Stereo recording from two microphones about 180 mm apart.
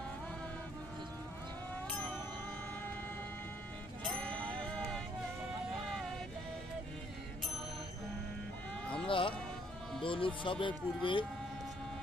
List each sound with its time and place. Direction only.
1.9 s music: 10° left (ahead or behind)
4.0 s music: 5° left (ahead or behind)
9.0 s music: 30° left (ahead or behind)
10.0 s speech: 30° left (ahead or behind)